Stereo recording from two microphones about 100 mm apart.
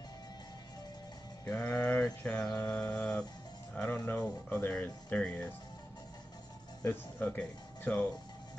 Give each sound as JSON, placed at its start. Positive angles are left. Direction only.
{"t": 1.5, "sound": "speech", "side_deg": 10}
{"t": 6.8, "sound": "speech", "side_deg": 20}